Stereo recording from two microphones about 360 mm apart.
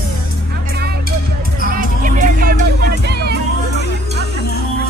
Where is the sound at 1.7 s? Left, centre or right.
Right.